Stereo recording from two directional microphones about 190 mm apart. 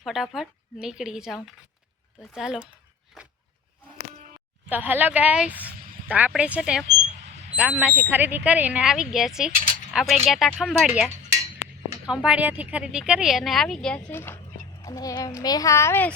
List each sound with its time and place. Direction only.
0.0 s speech: centre (ahead or behind)
4.7 s a child's voice: 10° right (ahead or behind); by 16.1 s 10° left (ahead or behind)